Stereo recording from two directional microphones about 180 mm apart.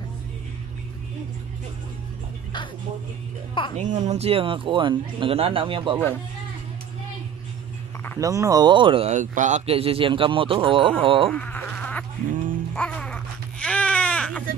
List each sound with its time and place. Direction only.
3.7 s speech: 40° right (ahead or behind)
8.2 s a man's voice: 20° right (ahead or behind)
11.2 s insect: 10° left (ahead or behind)
12.3 s a sound: 50° right (ahead or behind)
12.7 s baby cry: 5° left (ahead or behind)